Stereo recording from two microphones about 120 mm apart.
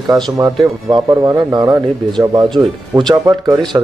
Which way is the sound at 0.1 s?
30° right (ahead or behind).